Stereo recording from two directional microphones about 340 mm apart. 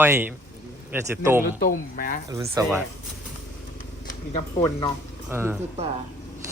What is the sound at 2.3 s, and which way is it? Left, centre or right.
Speech, centre.